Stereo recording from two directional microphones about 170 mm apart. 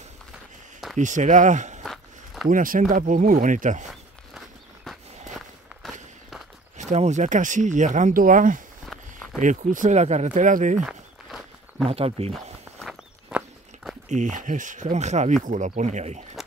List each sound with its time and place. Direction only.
0.9 s speech: 45° right (ahead or behind)
1.8 s walk: centre (ahead or behind)
2.4 s speech: 55° right (ahead or behind)
5.3 s walk: centre (ahead or behind)
6.8 s speech: 45° right (ahead or behind)
8.8 s walk: centre (ahead or behind)
9.4 s speech: 50° right (ahead or behind)
10.8 s walk: centre (ahead or behind)
11.9 s speech: 35° right (ahead or behind)
12.7 s walk: centre (ahead or behind)
14.0 s speech: 45° right (ahead or behind)